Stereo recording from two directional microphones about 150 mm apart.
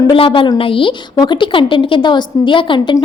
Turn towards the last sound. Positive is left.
turn(degrees=30)  # may be behind; listen again after turning